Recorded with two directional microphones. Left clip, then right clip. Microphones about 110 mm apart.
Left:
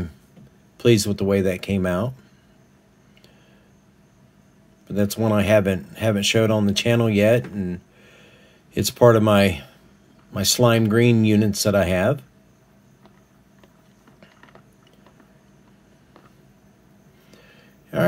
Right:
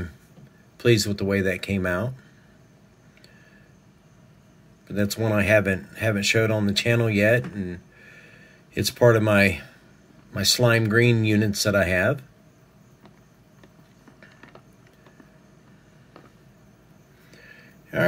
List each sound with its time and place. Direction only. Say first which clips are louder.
0.7 s speech: left 3 dB; 20° left (ahead or behind)
4.8 s speech: left 3 dB; 20° left (ahead or behind)
17.3 s a sound: right 3 dB; 20° left (ahead or behind)